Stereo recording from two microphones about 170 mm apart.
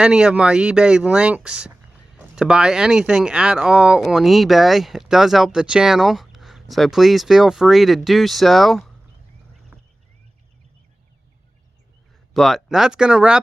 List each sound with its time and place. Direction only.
0.0 s speech: 5° right (ahead or behind)
12.3 s speech: centre (ahead or behind)